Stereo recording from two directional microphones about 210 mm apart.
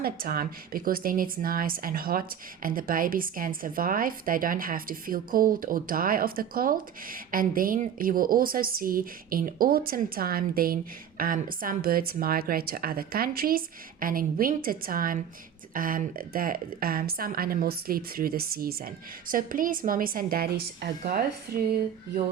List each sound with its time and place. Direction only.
0.0 s a woman's voice: 45° right (ahead or behind)